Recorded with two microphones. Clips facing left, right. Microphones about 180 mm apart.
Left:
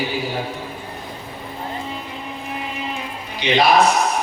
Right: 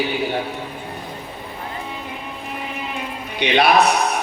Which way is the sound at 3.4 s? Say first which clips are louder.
Right 1 dB; 65° right (ahead or behind).